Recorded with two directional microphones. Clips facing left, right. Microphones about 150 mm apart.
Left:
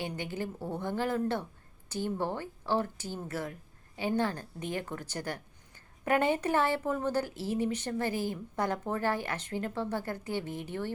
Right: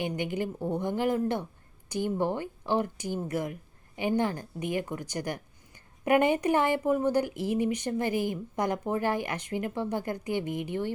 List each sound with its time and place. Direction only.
0.0 s speech: 15° right (ahead or behind)